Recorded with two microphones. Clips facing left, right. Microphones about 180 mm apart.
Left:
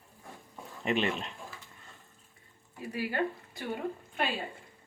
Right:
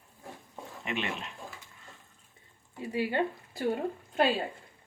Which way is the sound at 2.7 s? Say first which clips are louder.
Right 3 dB; 25° right (ahead or behind).